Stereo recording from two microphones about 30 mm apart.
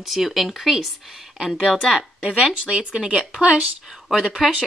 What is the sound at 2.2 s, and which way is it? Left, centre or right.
Speech, right.